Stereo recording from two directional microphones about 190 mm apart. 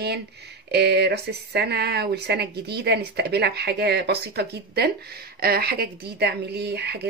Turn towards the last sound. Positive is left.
turn(degrees=-60)  # may be behind; listen again after turning